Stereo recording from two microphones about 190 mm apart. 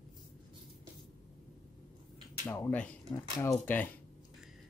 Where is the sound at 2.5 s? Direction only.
10° left (ahead or behind).